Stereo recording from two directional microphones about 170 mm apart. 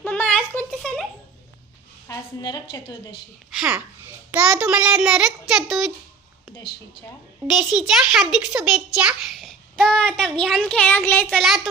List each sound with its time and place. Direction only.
0.0 s a sound: 10° left (ahead or behind)
2.0 s a woman's voice: 25° left (ahead or behind)
3.5 s a child's voice: 5° right (ahead or behind)
7.4 s a child's voice: centre (ahead or behind)
9.7 s child singing: 5° left (ahead or behind)
10.2 s a child's voice: 5° left (ahead or behind)
11.3 s a child's voice: centre (ahead or behind)